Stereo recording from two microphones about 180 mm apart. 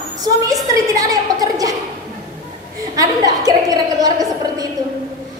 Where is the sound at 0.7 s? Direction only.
20° right (ahead or behind).